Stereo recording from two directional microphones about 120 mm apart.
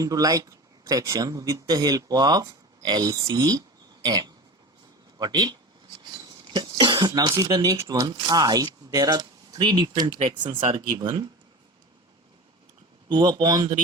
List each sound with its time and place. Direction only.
0.0 s speech: 30° right (ahead or behind)
10.2 s speech: 45° right (ahead or behind)
10.9 s speech: 30° right (ahead or behind)
13.1 s speech: 40° right (ahead or behind)